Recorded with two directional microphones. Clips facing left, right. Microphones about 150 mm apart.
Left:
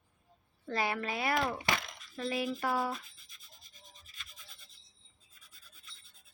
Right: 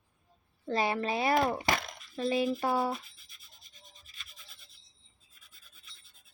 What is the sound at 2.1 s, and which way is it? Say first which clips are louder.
Speech: right 5 dB; 25° right (ahead or behind).